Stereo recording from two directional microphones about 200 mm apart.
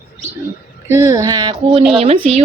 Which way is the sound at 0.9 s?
15° right (ahead or behind).